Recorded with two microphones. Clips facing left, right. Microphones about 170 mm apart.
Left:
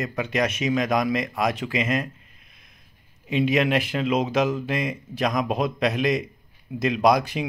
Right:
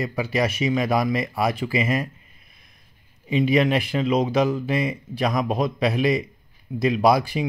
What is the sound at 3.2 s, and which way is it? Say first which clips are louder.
Speech: right 2 dB; centre (ahead or behind).